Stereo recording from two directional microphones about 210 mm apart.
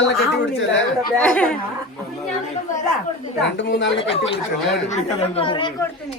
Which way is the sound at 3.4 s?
60° left (ahead or behind).